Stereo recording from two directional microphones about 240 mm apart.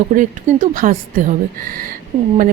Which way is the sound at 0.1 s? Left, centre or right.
Right.